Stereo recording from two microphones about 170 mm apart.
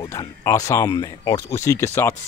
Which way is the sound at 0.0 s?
20° left (ahead or behind).